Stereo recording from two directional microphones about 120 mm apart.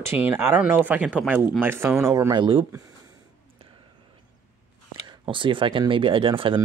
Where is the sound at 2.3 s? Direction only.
40° right (ahead or behind).